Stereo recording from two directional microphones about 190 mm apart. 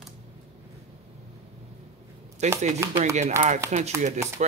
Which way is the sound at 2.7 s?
15° right (ahead or behind).